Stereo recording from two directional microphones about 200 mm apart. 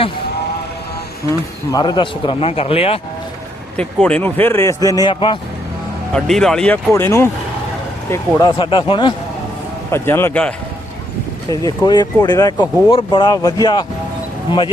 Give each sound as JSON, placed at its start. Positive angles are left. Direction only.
{"t": 1.3, "sound": "speech", "side_deg": 20}
{"t": 3.8, "sound": "a man's voice", "side_deg": 5}
{"t": 6.1, "sound": "speech", "side_deg": 0}
{"t": 9.9, "sound": "a man's voice", "side_deg": 10}
{"t": 11.6, "sound": "speech", "side_deg": 20}